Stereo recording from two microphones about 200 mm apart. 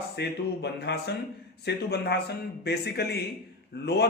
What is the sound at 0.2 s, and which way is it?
Speech, 55° left (ahead or behind).